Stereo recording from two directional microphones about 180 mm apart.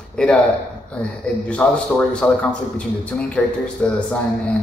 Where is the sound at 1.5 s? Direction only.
5° left (ahead or behind).